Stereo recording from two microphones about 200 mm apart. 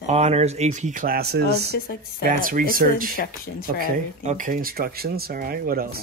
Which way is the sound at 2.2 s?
45° right (ahead or behind).